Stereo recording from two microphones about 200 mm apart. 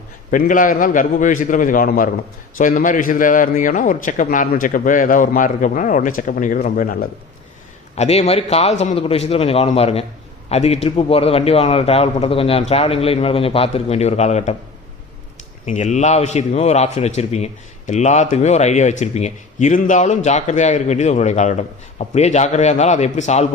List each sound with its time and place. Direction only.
0.3 s a man's voice: 40° left (ahead or behind)
7.9 s a man's voice: 35° left (ahead or behind)
15.6 s a man's voice: 35° left (ahead or behind)